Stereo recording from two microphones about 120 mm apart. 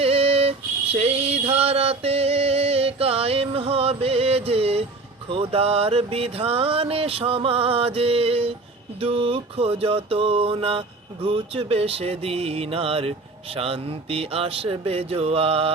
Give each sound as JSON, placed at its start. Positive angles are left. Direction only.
{"t": 0.0, "sound": "female singing", "side_deg": -55}
{"t": 0.9, "sound": "a sound", "side_deg": -55}
{"t": 5.3, "sound": "mantra", "side_deg": -50}